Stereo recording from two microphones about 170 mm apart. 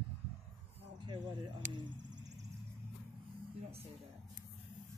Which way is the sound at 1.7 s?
25° right (ahead or behind).